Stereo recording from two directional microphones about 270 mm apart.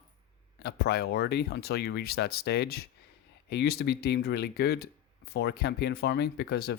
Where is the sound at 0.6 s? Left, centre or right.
Left.